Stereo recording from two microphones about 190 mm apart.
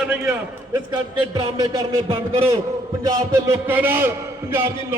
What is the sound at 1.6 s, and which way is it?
Speech, 25° right (ahead or behind).